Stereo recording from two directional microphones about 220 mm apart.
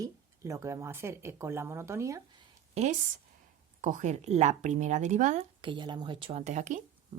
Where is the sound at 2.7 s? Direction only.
30° right (ahead or behind).